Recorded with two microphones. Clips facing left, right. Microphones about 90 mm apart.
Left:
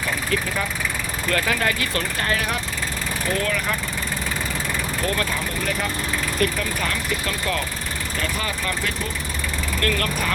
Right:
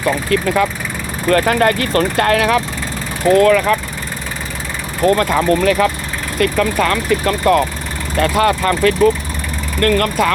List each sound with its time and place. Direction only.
0.3 s speech: 75° right (ahead or behind)
1.3 s speech: 45° right (ahead or behind); by 2.6 s 75° right (ahead or behind)
3.2 s speech: 50° right (ahead or behind)
3.7 s speech: 90° right
5.0 s speech: 40° right (ahead or behind)
5.3 s speech: 70° right (ahead or behind)
6.4 s speech: 65° right (ahead or behind)
8.1 s speech: 60° right (ahead or behind); by 9.0 s 80° right
9.8 s speech: 45° right (ahead or behind)